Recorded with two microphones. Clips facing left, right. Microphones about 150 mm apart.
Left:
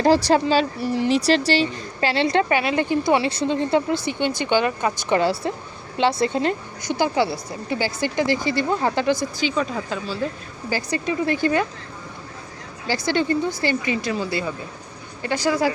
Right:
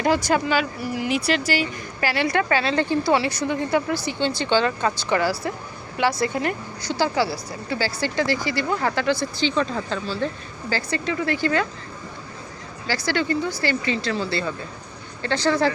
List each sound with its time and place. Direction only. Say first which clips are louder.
0.0 s speech: left 4 dB; 35° left (ahead or behind)
12.9 s speech: left 2 dB; 20° left (ahead or behind)